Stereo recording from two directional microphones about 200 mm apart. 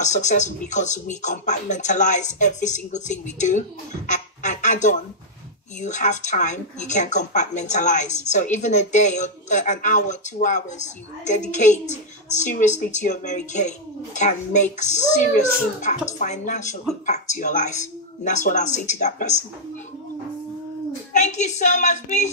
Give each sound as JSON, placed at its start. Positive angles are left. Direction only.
{"t": 0.0, "sound": "speech", "side_deg": 35}
{"t": 21.1, "sound": "speech", "side_deg": 35}